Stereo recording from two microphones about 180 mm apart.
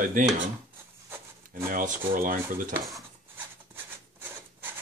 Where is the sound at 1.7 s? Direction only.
50° right (ahead or behind).